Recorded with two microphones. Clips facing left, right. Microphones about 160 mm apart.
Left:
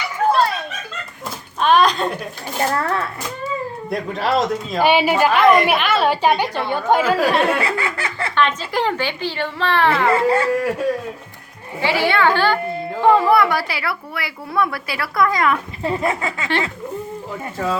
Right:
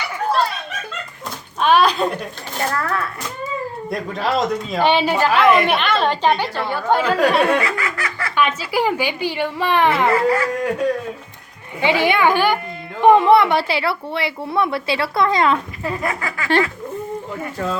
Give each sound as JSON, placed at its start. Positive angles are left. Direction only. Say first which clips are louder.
{"t": 1.6, "sound": "a sound", "louder": "even", "side_deg": -5}
{"t": 2.6, "sound": "speech", "louder": "left 2 dB", "side_deg": 25}
{"t": 3.8, "sound": "a woman's voice", "louder": "left 2 dB", "side_deg": 0}
{"t": 7.0, "sound": "speech", "louder": "right 1 dB", "side_deg": 5}
{"t": 7.6, "sound": "laughter", "louder": "left 1 dB", "side_deg": 30}
{"t": 8.4, "sound": "a woman's voice", "louder": "right 1 dB", "side_deg": -10}
{"t": 10.1, "sound": "speech", "louder": "left 1 dB", "side_deg": 25}
{"t": 10.6, "sound": "speech", "louder": "even", "side_deg": 5}
{"t": 11.8, "sound": "a woman's voice", "louder": "right 1 dB", "side_deg": -20}
{"t": 15.8, "sound": "speech", "louder": "left 3 dB", "side_deg": 25}